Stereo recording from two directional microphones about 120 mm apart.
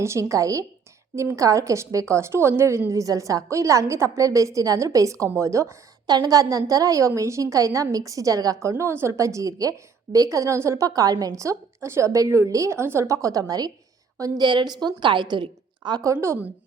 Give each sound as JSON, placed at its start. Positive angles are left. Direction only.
{"t": 0.0, "sound": "a woman's voice", "side_deg": -25}
{"t": 16.2, "sound": "a woman's voice", "side_deg": -20}